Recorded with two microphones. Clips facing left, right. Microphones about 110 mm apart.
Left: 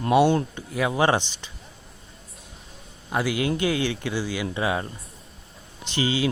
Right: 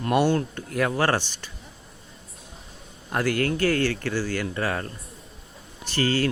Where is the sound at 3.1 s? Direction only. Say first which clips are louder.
Even; 10° left (ahead or behind).